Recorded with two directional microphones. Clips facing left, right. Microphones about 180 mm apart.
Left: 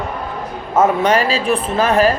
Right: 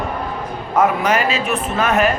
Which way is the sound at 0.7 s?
30° left (ahead or behind).